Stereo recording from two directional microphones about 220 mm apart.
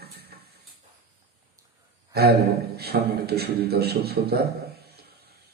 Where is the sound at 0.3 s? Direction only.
45° right (ahead or behind).